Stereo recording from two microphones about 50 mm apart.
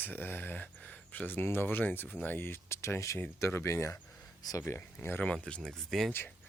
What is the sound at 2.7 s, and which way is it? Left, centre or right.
Speech, left.